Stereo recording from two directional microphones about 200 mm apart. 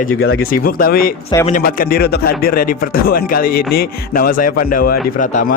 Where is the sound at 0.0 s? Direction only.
45° left (ahead or behind).